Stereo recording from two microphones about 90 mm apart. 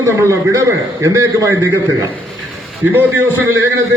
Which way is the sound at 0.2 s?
35° right (ahead or behind).